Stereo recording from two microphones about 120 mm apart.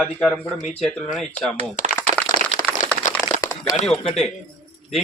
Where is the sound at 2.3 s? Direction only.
70° right (ahead or behind).